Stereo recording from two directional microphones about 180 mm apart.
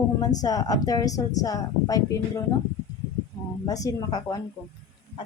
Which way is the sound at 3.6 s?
20° left (ahead or behind).